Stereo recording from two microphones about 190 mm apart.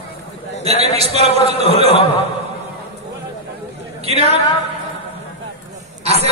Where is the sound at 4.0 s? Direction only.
35° right (ahead or behind).